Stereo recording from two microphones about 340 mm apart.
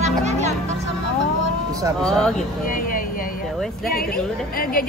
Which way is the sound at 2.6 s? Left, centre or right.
Left.